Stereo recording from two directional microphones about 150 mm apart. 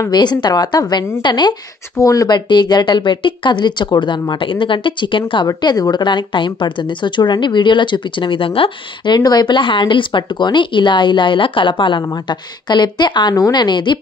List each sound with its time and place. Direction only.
0.0 s a woman's voice: 30° left (ahead or behind)